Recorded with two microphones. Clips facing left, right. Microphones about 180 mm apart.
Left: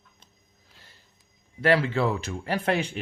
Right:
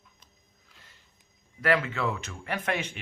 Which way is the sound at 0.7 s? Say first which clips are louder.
Left 2 dB; 30° left (ahead or behind).